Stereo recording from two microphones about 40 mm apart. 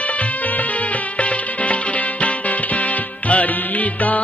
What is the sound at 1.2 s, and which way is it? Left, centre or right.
Music, left.